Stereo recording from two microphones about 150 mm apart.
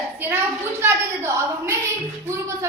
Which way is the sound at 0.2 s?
15° right (ahead or behind).